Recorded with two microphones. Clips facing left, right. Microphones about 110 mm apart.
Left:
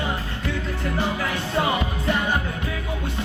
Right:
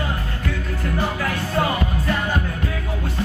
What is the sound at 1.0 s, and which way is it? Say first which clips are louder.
Music: right 1 dB; 20° left (ahead or behind).